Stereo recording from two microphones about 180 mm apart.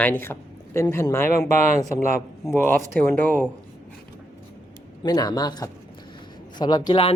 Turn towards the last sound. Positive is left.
turn(degrees=25)  # may be behind; listen again after turning